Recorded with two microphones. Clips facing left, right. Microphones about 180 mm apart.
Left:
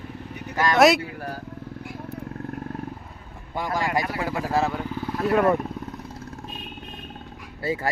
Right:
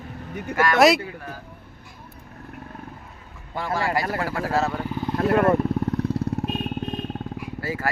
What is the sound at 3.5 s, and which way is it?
Speech, 15° left (ahead or behind).